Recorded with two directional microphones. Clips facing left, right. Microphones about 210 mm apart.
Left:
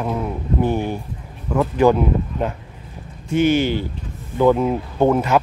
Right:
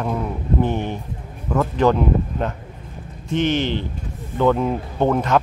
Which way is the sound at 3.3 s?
10° left (ahead or behind).